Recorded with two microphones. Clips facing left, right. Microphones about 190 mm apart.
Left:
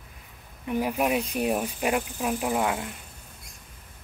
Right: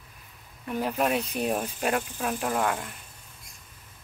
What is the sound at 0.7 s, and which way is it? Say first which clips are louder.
Speech: left 1 dB; 10° left (ahead or behind).